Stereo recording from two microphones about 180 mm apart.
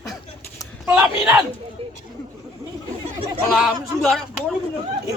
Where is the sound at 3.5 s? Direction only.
Centre (ahead or behind).